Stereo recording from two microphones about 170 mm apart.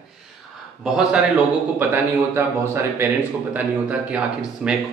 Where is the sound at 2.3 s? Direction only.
15° right (ahead or behind).